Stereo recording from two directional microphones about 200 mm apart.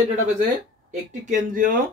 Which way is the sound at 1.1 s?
40° right (ahead or behind).